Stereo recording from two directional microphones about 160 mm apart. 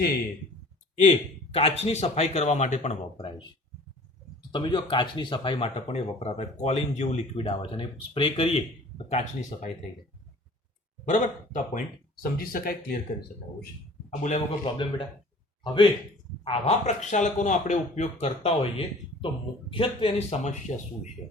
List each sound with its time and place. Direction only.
0.9 s speech: 45° left (ahead or behind)
4.5 s speech: 30° left (ahead or behind)
9.0 s speech: 45° left (ahead or behind)
11.0 s speech: 55° left (ahead or behind)
14.2 s speech: 45° left (ahead or behind)
14.6 s speech: 30° left (ahead or behind)